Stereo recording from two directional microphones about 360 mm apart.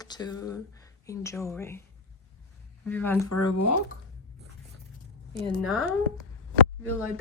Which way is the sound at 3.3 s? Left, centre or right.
Left.